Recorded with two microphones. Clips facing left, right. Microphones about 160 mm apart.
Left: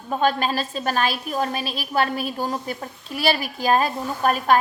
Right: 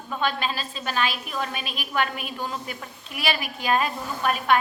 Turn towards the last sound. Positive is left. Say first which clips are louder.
# left 3 dB
turn(degrees=40)  # may be behind; listen again after turning